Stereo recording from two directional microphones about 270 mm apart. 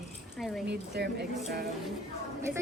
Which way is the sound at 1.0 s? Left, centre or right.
Right.